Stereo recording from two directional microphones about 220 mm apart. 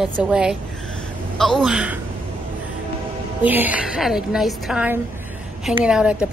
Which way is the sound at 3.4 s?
5° right (ahead or behind).